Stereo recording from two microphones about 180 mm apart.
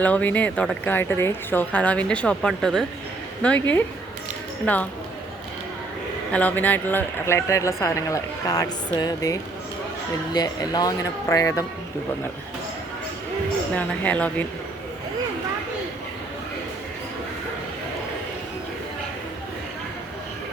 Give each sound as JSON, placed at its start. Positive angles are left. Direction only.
{"t": 0.0, "sound": "speech", "side_deg": 10}
{"t": 6.3, "sound": "speech", "side_deg": 10}
{"t": 13.7, "sound": "speech", "side_deg": 10}